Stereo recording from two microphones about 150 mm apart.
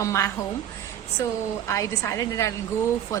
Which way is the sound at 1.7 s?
20° left (ahead or behind).